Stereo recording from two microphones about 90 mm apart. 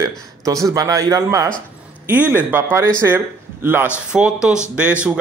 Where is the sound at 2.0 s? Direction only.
20° right (ahead or behind).